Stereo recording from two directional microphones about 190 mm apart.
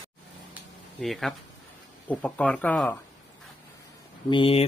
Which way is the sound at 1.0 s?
Centre (ahead or behind).